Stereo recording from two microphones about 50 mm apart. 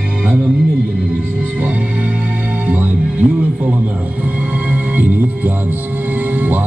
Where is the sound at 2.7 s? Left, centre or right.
Right.